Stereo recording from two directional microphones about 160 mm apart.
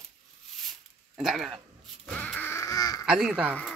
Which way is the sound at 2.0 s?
10° left (ahead or behind).